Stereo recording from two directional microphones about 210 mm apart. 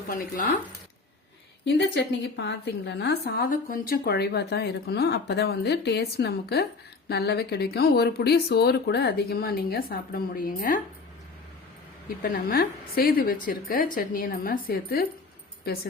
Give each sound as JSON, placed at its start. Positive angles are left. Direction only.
{"t": 0.1, "sound": "speech", "side_deg": 40}
{"t": 1.6, "sound": "a woman's voice", "side_deg": 55}
{"t": 12.2, "sound": "a woman's voice", "side_deg": 45}